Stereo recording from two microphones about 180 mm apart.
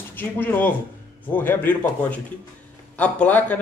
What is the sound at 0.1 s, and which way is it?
A man's voice, 10° left (ahead or behind).